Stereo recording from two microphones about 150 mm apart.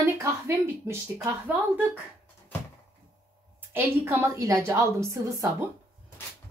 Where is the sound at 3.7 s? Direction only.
15° right (ahead or behind).